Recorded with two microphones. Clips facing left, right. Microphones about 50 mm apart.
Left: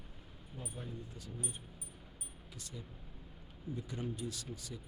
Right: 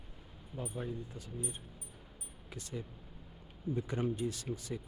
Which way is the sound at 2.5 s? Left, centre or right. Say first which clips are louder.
Right 7 dB; right.